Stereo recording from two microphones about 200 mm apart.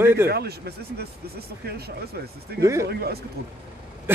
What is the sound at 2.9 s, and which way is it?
Speech, 50° right (ahead or behind).